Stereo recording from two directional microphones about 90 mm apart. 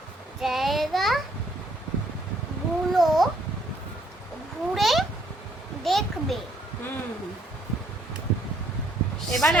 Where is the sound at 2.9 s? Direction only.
Centre (ahead or behind).